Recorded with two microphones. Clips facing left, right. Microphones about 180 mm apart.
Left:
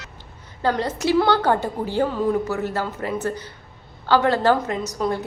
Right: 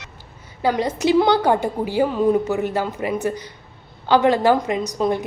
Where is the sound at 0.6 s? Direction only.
10° right (ahead or behind).